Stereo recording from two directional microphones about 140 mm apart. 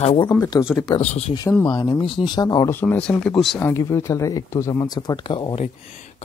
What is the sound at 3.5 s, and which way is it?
Speech, 15° left (ahead or behind).